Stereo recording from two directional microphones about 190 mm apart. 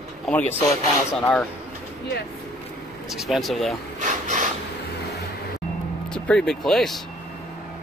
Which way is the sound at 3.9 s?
40° right (ahead or behind).